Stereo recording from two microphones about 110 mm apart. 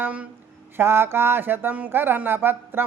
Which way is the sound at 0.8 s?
20° right (ahead or behind).